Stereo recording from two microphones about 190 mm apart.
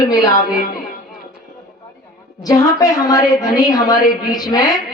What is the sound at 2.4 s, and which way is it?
A man's voice, 20° left (ahead or behind).